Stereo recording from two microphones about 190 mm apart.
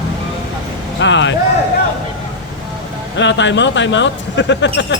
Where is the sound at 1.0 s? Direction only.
70° left (ahead or behind).